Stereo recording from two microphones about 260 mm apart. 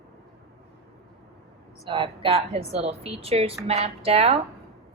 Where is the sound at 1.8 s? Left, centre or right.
Right.